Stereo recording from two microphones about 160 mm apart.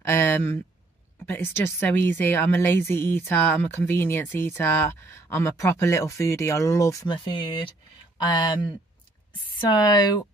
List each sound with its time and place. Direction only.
0.0 s speech: 15° left (ahead or behind)